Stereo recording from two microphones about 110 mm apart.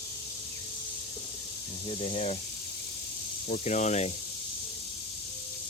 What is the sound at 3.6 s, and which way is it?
Speech, 90° left.